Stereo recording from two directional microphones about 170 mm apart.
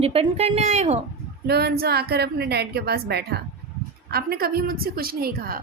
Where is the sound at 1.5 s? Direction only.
70° right (ahead or behind).